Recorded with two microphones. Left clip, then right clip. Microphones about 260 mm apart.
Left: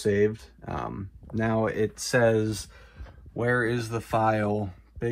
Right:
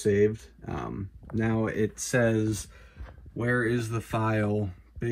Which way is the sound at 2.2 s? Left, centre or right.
Centre.